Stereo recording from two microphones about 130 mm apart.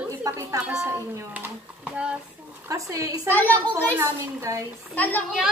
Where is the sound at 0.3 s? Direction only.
25° right (ahead or behind).